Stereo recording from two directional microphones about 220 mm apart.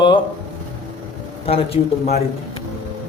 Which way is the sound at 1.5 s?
25° left (ahead or behind).